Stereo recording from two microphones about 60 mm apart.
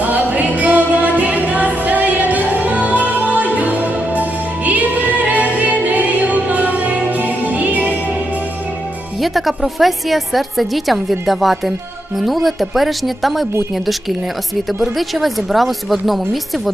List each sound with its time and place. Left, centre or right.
0.0 s music: right
9.2 s a woman's voice: centre
14.9 s a woman's voice: centre